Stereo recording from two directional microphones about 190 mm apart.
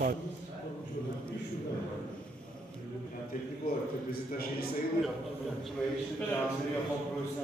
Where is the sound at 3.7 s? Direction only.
50° left (ahead or behind).